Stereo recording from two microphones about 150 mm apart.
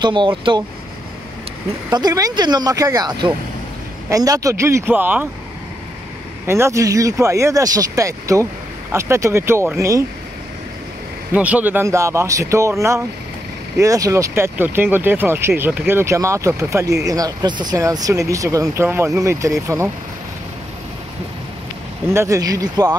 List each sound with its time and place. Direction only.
0.0 s speech: 35° right (ahead or behind)
1.9 s speech: 25° right (ahead or behind)
6.4 s speech: 15° right (ahead or behind)
11.3 s speech: 10° right (ahead or behind)
22.1 s speech: 20° right (ahead or behind)